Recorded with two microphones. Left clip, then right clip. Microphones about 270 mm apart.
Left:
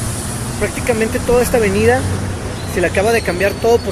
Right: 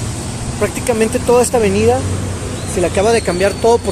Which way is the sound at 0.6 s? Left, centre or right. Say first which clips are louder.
Right 2 dB; centre.